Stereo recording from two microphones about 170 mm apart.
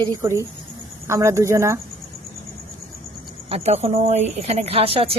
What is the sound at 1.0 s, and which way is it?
Speech, 15° right (ahead or behind).